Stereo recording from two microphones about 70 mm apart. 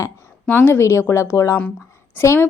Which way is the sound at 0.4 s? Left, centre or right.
Left.